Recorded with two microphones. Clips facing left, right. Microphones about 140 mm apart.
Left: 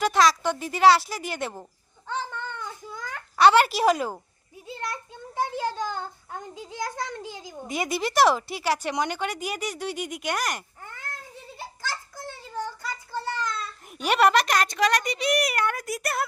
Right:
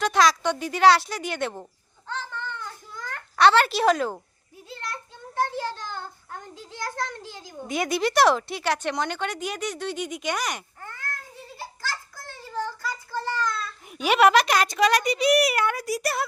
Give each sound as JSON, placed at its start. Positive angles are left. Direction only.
{"t": 0.0, "sound": "a woman's voice", "side_deg": 0}
{"t": 2.0, "sound": "babbling", "side_deg": 15}
{"t": 4.6, "sound": "a child's voice", "side_deg": 15}
{"t": 7.7, "sound": "a woman's voice", "side_deg": 0}
{"t": 10.8, "sound": "cat", "side_deg": 20}
{"t": 13.9, "sound": "a woman's voice", "side_deg": 0}